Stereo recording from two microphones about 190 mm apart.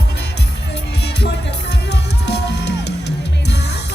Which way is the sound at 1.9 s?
60° left (ahead or behind).